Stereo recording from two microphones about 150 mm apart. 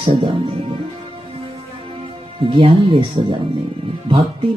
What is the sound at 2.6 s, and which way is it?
Speech, 40° right (ahead or behind).